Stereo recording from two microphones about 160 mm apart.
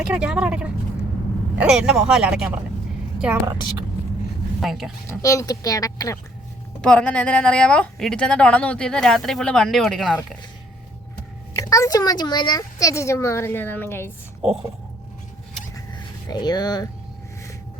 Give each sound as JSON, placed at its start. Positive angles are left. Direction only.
{"t": 0.1, "sound": "a woman's voice", "side_deg": -5}
{"t": 3.4, "sound": "a woman's voice", "side_deg": -25}
{"t": 4.6, "sound": "a woman's voice", "side_deg": 0}
{"t": 5.0, "sound": "a woman's voice", "side_deg": 20}
{"t": 6.8, "sound": "a woman's voice", "side_deg": 5}
{"t": 11.5, "sound": "a woman's voice", "side_deg": 20}
{"t": 14.4, "sound": "a woman's voice", "side_deg": -5}
{"t": 16.3, "sound": "a woman's voice", "side_deg": 25}